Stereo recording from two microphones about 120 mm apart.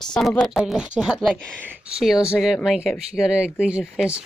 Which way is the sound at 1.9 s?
5° right (ahead or behind).